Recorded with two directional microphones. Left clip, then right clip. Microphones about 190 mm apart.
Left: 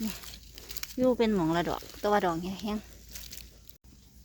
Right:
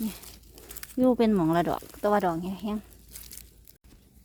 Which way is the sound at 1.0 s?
20° right (ahead or behind).